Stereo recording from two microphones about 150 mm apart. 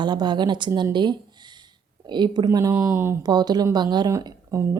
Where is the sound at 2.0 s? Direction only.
30° right (ahead or behind).